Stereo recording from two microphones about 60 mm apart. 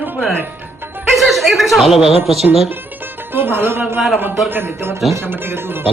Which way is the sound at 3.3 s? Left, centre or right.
Right.